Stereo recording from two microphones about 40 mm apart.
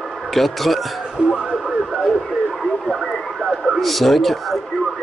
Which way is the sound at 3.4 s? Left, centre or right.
Centre.